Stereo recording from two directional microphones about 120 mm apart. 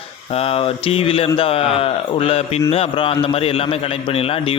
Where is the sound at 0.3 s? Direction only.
55° left (ahead or behind).